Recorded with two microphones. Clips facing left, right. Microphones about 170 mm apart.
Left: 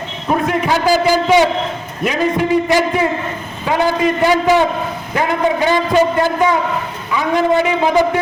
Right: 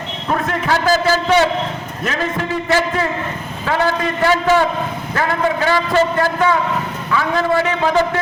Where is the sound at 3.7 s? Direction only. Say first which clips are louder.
Left 3 dB; 15° left (ahead or behind).